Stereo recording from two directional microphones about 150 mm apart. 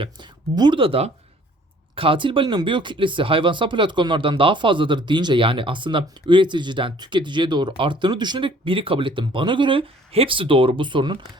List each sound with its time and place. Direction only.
0.0 s speech: 30° right (ahead or behind)